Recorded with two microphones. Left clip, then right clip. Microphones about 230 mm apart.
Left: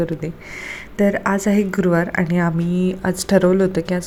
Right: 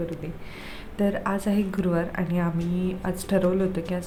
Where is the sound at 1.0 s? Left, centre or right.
Left.